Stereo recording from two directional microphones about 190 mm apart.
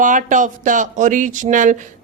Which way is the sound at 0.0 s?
45° right (ahead or behind).